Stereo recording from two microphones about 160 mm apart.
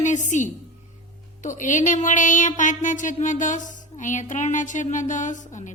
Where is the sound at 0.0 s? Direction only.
50° left (ahead or behind).